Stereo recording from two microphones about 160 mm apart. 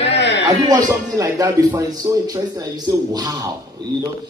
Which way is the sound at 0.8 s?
20° right (ahead or behind).